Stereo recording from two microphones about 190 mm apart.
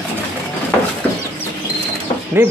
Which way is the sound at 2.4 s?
10° right (ahead or behind).